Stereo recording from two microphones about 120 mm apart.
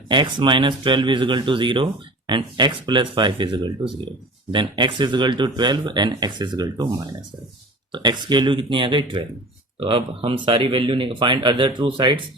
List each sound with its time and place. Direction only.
0.1 s speech: 40° right (ahead or behind)